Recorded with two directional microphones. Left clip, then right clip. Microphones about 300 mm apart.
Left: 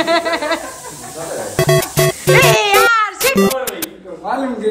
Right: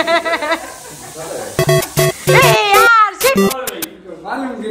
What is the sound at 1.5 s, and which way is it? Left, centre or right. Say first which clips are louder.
Music: even; centre.